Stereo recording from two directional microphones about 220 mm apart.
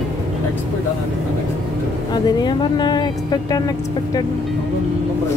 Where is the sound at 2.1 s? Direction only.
20° left (ahead or behind).